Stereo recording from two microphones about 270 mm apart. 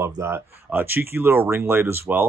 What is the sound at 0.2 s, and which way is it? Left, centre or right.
Speech, centre.